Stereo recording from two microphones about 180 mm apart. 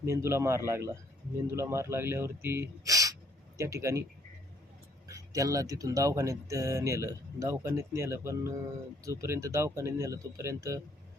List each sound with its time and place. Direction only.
0.0 s speech: 15° right (ahead or behind)
5.0 s speech: 20° right (ahead or behind)